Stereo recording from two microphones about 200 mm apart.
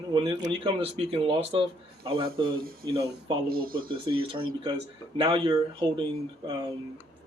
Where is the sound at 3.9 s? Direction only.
25° right (ahead or behind).